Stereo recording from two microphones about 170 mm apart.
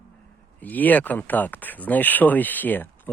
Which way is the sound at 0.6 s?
10° left (ahead or behind).